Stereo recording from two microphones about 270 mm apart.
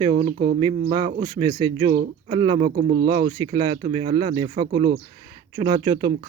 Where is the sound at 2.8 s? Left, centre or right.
Right.